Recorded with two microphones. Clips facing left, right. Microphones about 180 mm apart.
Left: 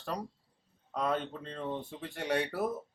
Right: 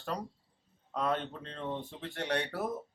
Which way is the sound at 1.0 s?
5° left (ahead or behind).